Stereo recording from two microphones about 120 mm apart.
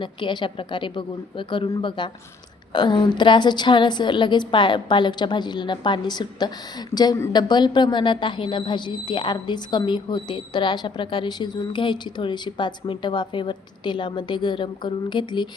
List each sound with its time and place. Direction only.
0.0 s a woman's voice: 40° left (ahead or behind)